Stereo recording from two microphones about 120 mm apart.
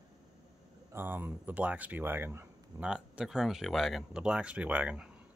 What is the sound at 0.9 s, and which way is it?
Speech, 15° right (ahead or behind).